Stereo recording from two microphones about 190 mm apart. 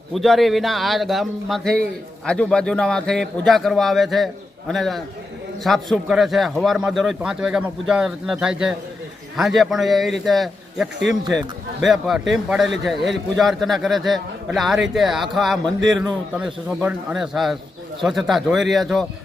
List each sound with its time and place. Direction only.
0.1 s a man's voice: centre (ahead or behind)